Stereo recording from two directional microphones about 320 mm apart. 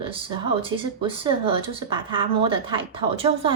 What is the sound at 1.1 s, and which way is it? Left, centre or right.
A woman's voice, centre.